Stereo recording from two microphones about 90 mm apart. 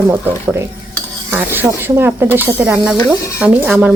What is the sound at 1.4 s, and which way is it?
Speech, 20° right (ahead or behind).